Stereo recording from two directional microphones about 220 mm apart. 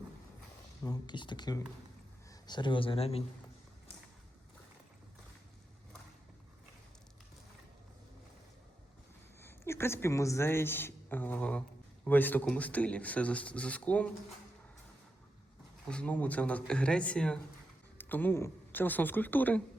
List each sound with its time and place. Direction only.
0.9 s speech: 20° left (ahead or behind)
9.4 s speech: 10° left (ahead or behind)
15.9 s a woman's voice: 5° left (ahead or behind)